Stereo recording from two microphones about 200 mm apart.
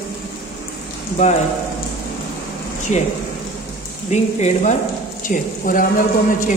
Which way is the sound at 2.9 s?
35° left (ahead or behind).